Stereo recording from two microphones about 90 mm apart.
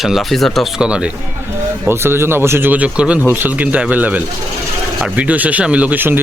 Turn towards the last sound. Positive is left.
turn(degrees=-20)  # may be behind; listen again after turning